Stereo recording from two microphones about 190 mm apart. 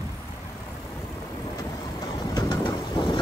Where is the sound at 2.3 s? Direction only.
20° left (ahead or behind).